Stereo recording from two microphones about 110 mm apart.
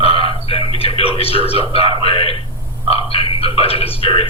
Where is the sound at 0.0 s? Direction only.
60° left (ahead or behind).